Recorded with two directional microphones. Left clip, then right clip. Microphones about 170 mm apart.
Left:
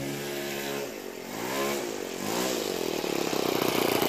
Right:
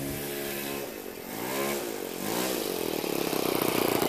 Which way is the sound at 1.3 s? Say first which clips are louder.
Left 1 dB; 80° right.